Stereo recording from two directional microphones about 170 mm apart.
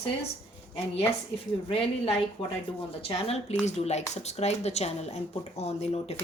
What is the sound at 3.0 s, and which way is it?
Speech, 35° left (ahead or behind).